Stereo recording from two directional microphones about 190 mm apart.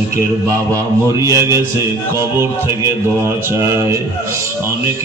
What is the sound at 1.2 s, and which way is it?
Speech, 15° right (ahead or behind).